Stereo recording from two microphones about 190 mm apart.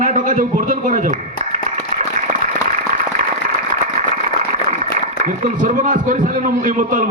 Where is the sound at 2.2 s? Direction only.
40° right (ahead or behind).